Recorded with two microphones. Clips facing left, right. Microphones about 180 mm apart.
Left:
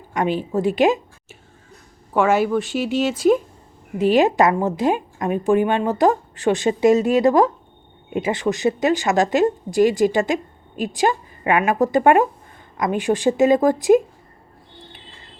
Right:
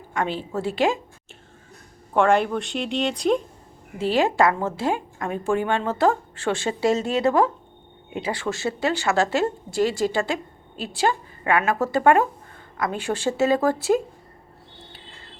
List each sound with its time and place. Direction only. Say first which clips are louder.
0.1 s speech: left 5 dB; 15° left (ahead or behind)
2.1 s a woman's voice: left 2 dB; 5° left (ahead or behind)
3.9 s speech: left 5 dB; 15° left (ahead or behind)